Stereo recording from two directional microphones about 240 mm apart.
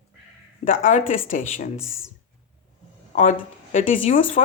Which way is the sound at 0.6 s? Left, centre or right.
Left.